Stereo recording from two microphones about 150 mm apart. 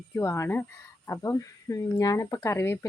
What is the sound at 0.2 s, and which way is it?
A woman's voice, 20° left (ahead or behind).